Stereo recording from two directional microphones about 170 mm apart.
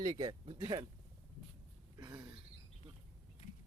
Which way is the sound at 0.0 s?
25° right (ahead or behind).